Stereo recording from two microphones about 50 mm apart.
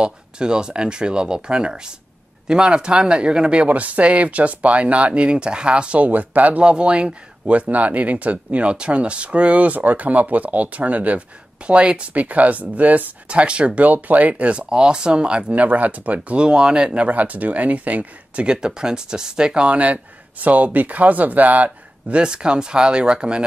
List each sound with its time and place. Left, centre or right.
0.0 s speech: centre
3.6 s speech: right
6.6 s speech: right
15.5 s speech: right
17.1 s speech: right
22.2 s speech: centre